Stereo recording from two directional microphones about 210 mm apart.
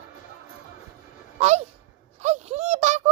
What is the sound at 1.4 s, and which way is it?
Speech, 30° right (ahead or behind).